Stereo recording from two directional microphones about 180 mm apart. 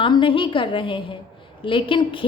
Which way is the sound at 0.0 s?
25° left (ahead or behind).